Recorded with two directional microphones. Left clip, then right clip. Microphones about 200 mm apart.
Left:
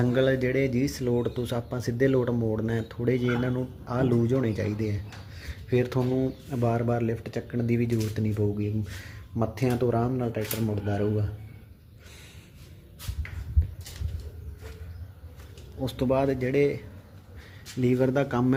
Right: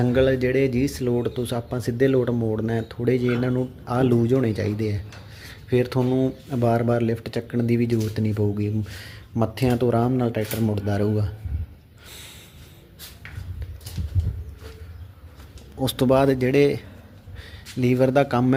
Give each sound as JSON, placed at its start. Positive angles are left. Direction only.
{"t": 0.0, "sound": "speech", "side_deg": -10}
{"t": 15.8, "sound": "speech", "side_deg": -25}